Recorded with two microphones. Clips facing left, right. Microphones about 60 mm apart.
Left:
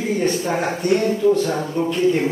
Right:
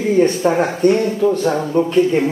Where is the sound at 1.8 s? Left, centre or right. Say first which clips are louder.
Right 5 dB; right.